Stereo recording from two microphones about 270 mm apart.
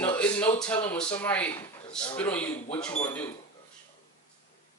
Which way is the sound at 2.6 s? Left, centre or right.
Left.